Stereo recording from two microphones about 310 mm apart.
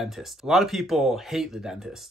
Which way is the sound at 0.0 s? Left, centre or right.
Centre.